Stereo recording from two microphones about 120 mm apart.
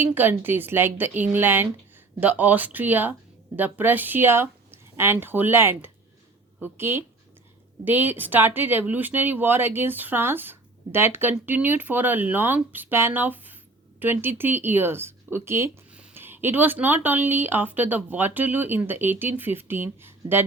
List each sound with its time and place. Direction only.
0.0 s speech: 15° right (ahead or behind)
15.9 s speech: 10° right (ahead or behind)